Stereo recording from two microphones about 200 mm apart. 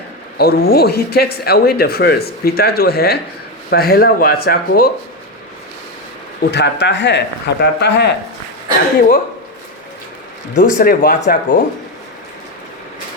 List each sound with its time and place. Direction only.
0.3 s speech: 50° left (ahead or behind)
6.4 s speech: 60° left (ahead or behind)
10.8 s speech: 45° left (ahead or behind)